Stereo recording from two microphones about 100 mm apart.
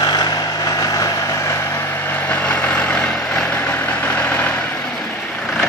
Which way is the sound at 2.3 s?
15° left (ahead or behind).